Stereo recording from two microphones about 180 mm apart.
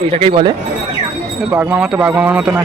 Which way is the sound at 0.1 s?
30° right (ahead or behind).